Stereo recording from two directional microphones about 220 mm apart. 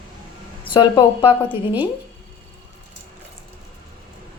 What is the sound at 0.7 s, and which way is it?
Speech, 20° left (ahead or behind).